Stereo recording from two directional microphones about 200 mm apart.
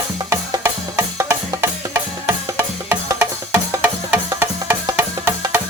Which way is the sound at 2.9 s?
10° right (ahead or behind).